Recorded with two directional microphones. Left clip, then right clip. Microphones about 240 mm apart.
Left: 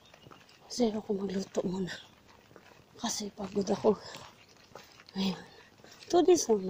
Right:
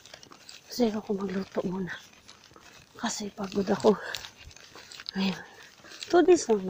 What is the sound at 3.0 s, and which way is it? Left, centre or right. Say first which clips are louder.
Speech: right 3 dB; centre.